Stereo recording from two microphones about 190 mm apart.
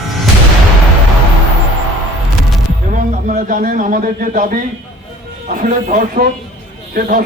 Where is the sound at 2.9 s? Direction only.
45° right (ahead or behind).